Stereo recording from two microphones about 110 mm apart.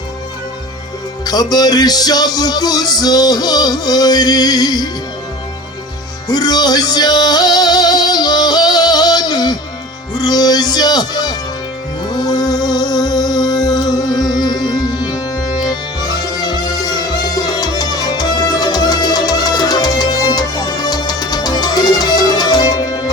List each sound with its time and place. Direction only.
1.2 s music: 35° left (ahead or behind)
6.2 s music: 35° left (ahead or behind)
10.2 s speech: 35° left (ahead or behind)
12.0 s music: 40° left (ahead or behind)